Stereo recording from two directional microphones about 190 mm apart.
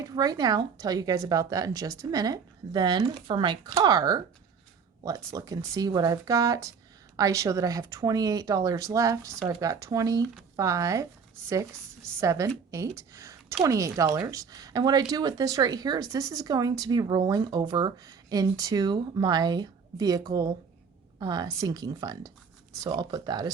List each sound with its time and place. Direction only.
0.0 s speech: 20° right (ahead or behind)